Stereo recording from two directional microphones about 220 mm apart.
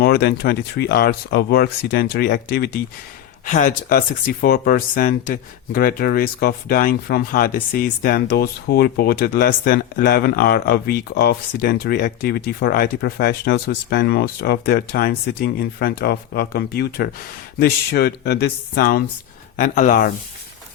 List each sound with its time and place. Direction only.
0.0 s speech: 45° left (ahead or behind)
3.4 s speech: 35° left (ahead or behind)